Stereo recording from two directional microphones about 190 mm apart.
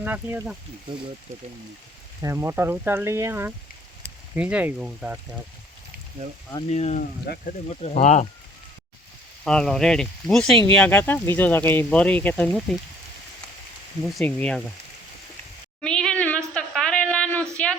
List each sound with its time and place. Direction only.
0.0 s speech: 10° right (ahead or behind)
2.2 s speech: 15° right (ahead or behind)
6.7 s speech: 35° left (ahead or behind)
7.3 s speech: 55° left (ahead or behind)
7.7 s speech: 35° left (ahead or behind)
9.4 s speech: 5° left (ahead or behind)
14.0 s speech: centre (ahead or behind)
15.8 s a sound: 5° left (ahead or behind)